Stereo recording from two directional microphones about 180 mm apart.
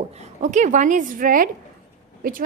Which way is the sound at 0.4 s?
45° right (ahead or behind).